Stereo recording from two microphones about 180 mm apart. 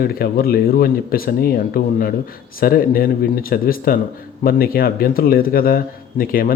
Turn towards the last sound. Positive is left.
turn(degrees=55)  # may be behind; listen again after turning